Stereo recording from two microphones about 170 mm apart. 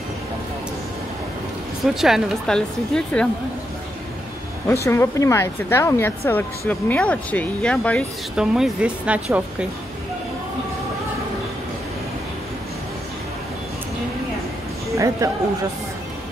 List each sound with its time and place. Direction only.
2.0 s speech: centre (ahead or behind)
4.8 s a woman's voice: 15° left (ahead or behind)
8.4 s speech: 5° right (ahead or behind)
15.0 s a man's voice: 20° right (ahead or behind)